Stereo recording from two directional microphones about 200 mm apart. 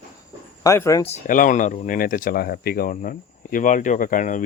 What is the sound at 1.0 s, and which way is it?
Speech, 35° left (ahead or behind).